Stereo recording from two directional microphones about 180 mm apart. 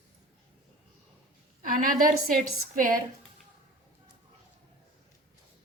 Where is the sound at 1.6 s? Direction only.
50° right (ahead or behind).